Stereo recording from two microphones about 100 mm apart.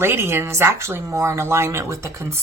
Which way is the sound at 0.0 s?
25° right (ahead or behind).